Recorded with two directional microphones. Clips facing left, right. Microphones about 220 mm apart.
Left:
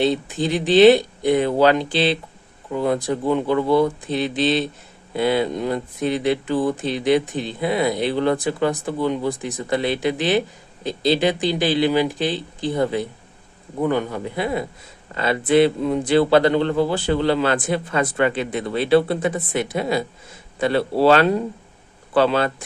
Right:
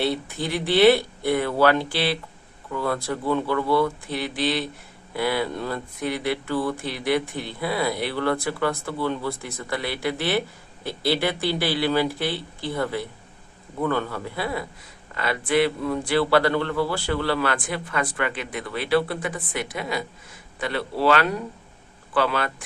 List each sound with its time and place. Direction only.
0.0 s speech: 20° left (ahead or behind)